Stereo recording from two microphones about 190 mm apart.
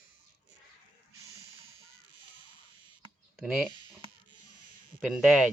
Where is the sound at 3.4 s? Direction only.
Centre (ahead or behind).